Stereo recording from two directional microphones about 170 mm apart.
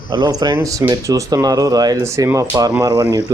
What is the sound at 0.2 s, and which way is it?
Speech, 20° right (ahead or behind).